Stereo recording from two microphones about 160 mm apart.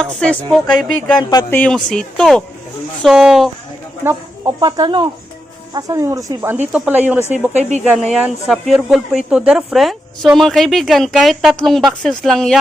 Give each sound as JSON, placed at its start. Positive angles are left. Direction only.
{"t": 0.0, "sound": "speech", "side_deg": 5}
{"t": 4.0, "sound": "speech", "side_deg": -20}
{"t": 7.5, "sound": "speech", "side_deg": -45}
{"t": 8.1, "sound": "speech", "side_deg": -5}